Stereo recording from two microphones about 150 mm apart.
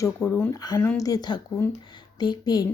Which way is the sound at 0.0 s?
20° left (ahead or behind).